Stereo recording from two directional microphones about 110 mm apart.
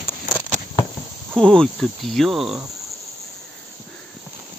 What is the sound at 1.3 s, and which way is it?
Speech, 5° left (ahead or behind).